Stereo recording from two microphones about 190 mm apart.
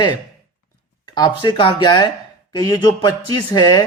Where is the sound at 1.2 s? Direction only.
20° left (ahead or behind).